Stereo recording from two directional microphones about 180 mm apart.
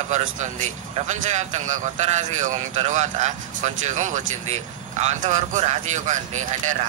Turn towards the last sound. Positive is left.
turn(degrees=-40)  # may be behind; listen again after turning